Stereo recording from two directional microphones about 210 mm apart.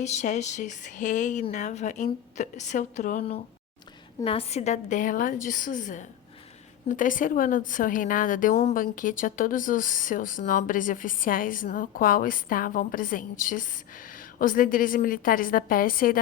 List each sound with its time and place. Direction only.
0.0 s speech: 35° left (ahead or behind)